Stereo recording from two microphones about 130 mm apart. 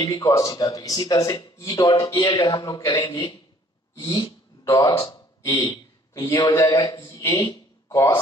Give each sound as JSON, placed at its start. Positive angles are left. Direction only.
{"t": 0.0, "sound": "a man's voice", "side_deg": 25}